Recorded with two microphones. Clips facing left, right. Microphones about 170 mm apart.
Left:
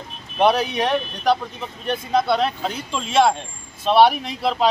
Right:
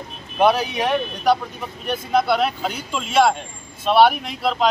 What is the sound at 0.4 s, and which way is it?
Speech, 5° right (ahead or behind).